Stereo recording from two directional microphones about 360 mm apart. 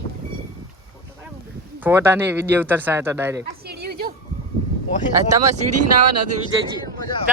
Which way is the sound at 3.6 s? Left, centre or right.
Right.